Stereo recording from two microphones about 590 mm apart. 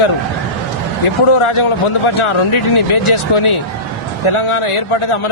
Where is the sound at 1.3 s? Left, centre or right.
Left.